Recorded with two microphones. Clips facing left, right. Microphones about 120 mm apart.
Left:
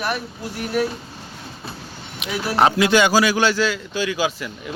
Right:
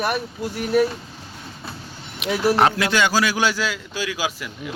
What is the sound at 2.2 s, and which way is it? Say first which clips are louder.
Speech: right 1 dB; centre (ahead or behind).